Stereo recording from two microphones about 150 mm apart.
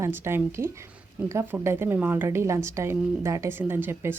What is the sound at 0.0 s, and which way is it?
A woman's voice, 15° right (ahead or behind).